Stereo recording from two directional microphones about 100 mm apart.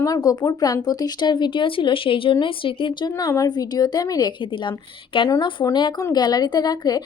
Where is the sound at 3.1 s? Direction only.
35° left (ahead or behind).